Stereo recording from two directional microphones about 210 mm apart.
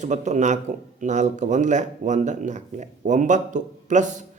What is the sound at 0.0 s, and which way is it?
Speech, 35° right (ahead or behind).